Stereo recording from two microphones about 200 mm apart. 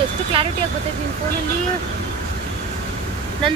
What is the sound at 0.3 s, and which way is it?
Speech, 25° right (ahead or behind).